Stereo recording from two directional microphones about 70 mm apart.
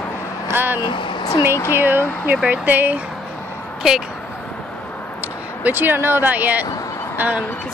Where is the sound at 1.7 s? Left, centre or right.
Right.